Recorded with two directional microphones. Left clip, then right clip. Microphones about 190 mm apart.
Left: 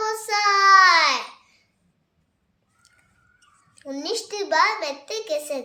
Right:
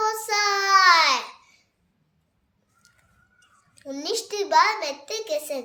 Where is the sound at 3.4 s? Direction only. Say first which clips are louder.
Left 1 dB; 5° left (ahead or behind).